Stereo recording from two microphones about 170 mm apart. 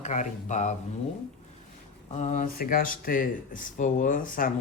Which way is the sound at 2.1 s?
45° left (ahead or behind).